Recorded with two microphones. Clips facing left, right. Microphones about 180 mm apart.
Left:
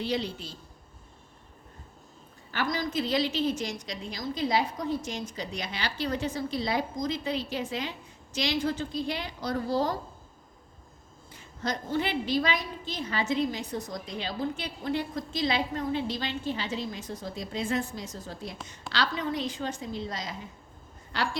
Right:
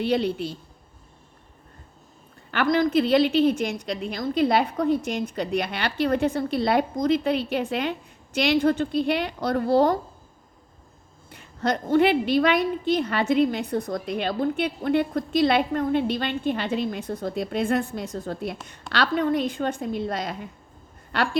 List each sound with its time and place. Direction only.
0.0 s a woman's voice: 60° right (ahead or behind)
2.5 s a woman's voice: 60° right (ahead or behind)
11.3 s a woman's voice: 65° right (ahead or behind)